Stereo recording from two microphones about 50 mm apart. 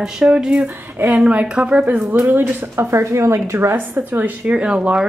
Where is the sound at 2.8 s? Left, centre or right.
Right.